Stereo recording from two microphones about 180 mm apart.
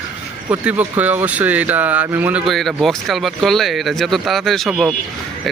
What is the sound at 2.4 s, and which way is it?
A man's voice, centre (ahead or behind).